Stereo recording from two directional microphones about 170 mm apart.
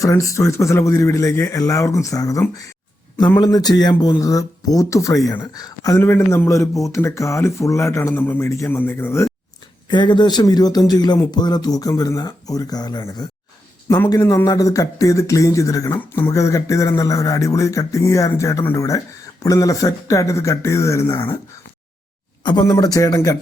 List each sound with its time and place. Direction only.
0.0 s speech: 20° left (ahead or behind)
3.4 s speech: 25° left (ahead or behind)
9.9 s speech: 25° left (ahead or behind)
22.4 s speech: 25° left (ahead or behind)